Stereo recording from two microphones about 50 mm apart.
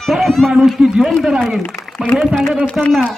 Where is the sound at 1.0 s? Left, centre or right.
Centre.